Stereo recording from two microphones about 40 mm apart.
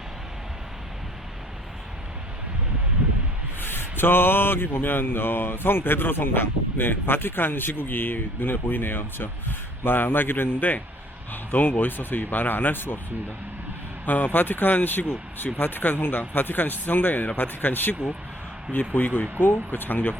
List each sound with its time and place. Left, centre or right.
3.6 s speech: left
14.0 s a man's voice: left